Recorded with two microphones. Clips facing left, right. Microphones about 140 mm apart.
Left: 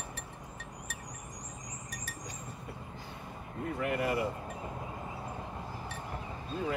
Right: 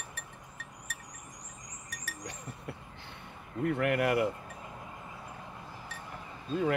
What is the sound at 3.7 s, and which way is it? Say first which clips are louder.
Speech: right 4 dB; 65° right (ahead or behind).